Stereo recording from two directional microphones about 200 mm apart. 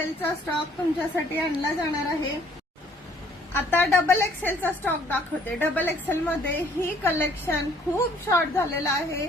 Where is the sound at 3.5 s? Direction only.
10° left (ahead or behind).